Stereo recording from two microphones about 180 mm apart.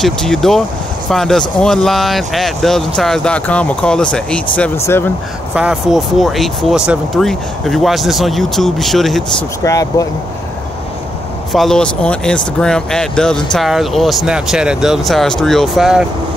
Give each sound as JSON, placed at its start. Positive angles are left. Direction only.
{"t": 0.0, "sound": "speech", "side_deg": 5}
{"t": 5.5, "sound": "speech", "side_deg": -5}
{"t": 9.6, "sound": "speech", "side_deg": 20}
{"t": 11.5, "sound": "speech", "side_deg": 5}